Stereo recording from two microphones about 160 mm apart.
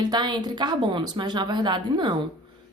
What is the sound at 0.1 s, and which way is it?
Speech, 30° right (ahead or behind).